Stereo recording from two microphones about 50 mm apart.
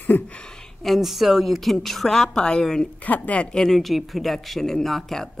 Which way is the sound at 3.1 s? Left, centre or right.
Left.